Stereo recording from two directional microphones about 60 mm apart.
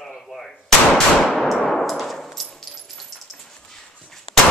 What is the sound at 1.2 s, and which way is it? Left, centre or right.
Clang, centre.